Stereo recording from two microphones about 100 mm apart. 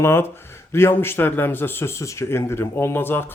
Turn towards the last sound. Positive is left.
turn(degrees=20)  # may be behind; listen again after turning